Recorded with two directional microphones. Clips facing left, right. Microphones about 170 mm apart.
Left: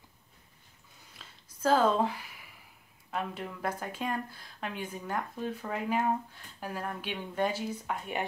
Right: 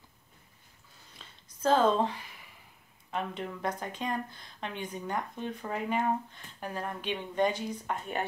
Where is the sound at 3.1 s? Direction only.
5° left (ahead or behind).